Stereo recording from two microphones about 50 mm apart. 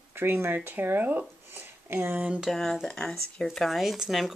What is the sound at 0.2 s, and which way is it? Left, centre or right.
Speech, right.